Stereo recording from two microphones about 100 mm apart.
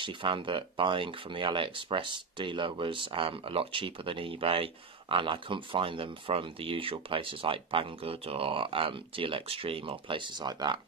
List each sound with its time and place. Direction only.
0.0 s speech: 55° right (ahead or behind)